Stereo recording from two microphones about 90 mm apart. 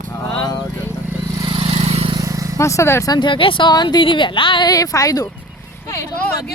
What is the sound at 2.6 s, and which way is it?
Speech, 35° left (ahead or behind).